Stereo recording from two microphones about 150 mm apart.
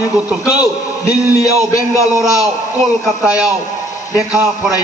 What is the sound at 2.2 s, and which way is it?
A man's voice, 5° right (ahead or behind).